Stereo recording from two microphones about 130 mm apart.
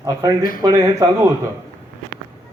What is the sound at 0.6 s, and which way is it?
Speech, 25° right (ahead or behind).